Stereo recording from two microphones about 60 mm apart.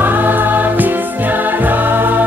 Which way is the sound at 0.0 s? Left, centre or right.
Right.